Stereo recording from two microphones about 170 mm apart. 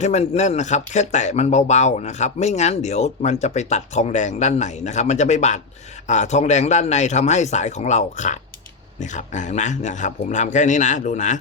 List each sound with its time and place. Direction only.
0.0 s speech: 40° left (ahead or behind)